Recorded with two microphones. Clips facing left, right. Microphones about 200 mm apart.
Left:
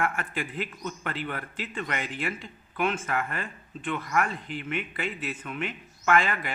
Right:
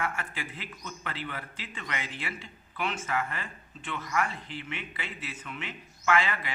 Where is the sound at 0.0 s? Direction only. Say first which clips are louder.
Left 5 dB; 50° left (ahead or behind).